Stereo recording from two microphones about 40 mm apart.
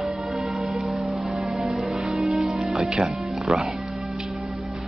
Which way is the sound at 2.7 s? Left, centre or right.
Centre.